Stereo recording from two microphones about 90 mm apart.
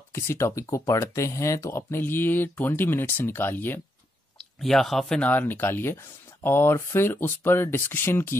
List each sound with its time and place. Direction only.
0.1 s speech: 30° left (ahead or behind)
4.4 s speech: 5° left (ahead or behind)
5.2 s speech: 20° left (ahead or behind)